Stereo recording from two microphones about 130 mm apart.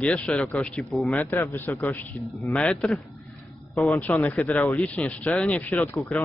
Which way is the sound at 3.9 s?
15° left (ahead or behind).